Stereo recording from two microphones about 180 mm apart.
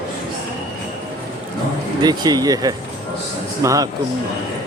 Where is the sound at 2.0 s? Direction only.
25° right (ahead or behind).